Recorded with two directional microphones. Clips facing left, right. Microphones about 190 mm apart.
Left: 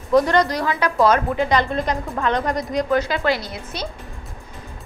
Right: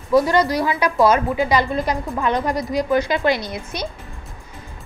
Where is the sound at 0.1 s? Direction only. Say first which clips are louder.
Even; 5° right (ahead or behind).